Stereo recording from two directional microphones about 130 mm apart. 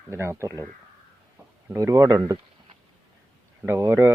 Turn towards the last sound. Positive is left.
turn(degrees=-20)  # may be behind; listen again after turning